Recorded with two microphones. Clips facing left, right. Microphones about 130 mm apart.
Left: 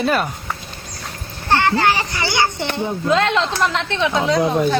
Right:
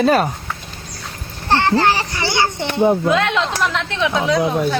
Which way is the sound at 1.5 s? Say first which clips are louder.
Right 1 dB; 30° right (ahead or behind).